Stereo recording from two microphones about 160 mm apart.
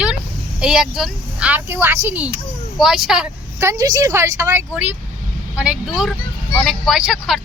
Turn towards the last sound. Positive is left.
turn(degrees=-5)  # may be behind; listen again after turning